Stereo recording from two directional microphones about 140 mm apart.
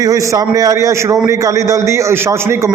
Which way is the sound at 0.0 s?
25° right (ahead or behind).